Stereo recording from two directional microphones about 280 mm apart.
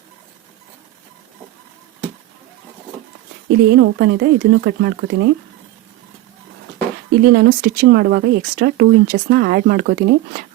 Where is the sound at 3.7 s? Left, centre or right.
Right.